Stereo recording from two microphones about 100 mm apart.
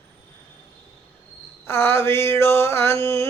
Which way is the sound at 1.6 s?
25° left (ahead or behind).